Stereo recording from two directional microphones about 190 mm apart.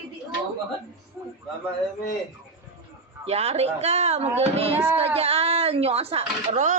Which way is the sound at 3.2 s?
30° right (ahead or behind).